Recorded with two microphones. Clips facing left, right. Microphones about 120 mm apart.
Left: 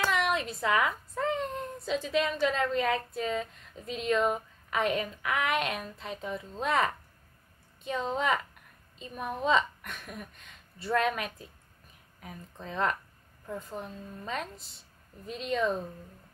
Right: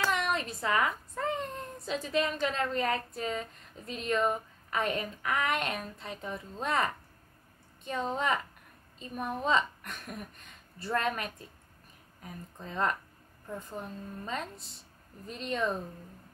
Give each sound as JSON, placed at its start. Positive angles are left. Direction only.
{"t": 0.5, "sound": "a woman's voice", "side_deg": 0}